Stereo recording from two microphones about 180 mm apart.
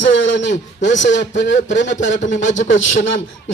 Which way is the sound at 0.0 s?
90° left.